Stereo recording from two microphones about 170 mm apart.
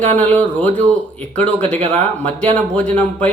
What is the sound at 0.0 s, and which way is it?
Speech, 40° right (ahead or behind).